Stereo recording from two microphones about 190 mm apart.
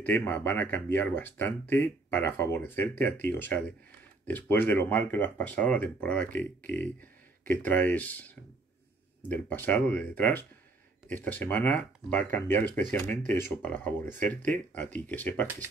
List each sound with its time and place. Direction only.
0.0 s speech: 10° left (ahead or behind)